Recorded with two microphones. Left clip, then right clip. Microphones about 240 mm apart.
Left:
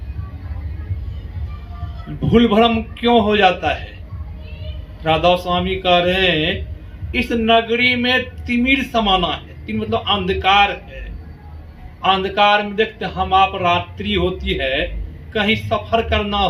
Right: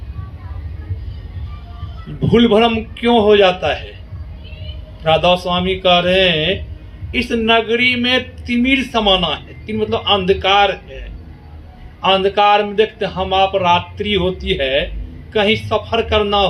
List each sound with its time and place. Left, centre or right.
2.2 s a man's voice: right
5.0 s a man's voice: right
12.0 s a man's voice: right